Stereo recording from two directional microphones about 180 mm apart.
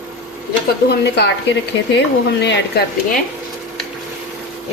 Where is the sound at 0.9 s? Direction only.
70° left (ahead or behind).